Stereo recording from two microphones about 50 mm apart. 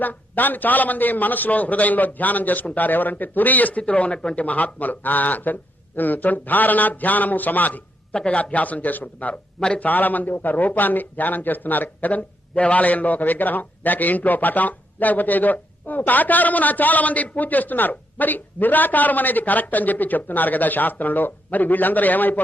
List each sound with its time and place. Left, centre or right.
0.0 s a man's voice: left
4.4 s a man's voice: left
9.3 s speech: centre
9.8 s a man's voice: left